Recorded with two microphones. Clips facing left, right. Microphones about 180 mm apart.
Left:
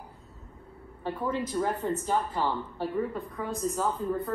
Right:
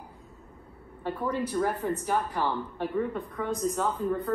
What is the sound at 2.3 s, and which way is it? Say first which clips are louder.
Speech: even; 15° right (ahead or behind).